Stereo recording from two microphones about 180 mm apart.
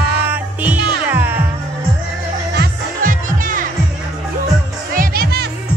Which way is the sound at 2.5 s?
50° right (ahead or behind).